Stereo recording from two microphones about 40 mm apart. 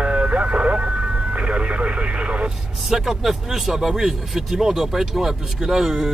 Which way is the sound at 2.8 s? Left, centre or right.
Centre.